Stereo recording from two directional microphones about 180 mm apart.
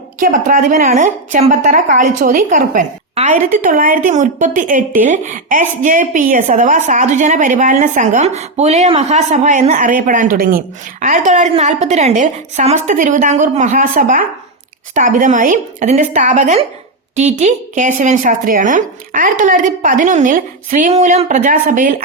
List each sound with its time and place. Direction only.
0.2 s a woman's voice: 50° right (ahead or behind)
11.0 s a woman's voice: 45° right (ahead or behind)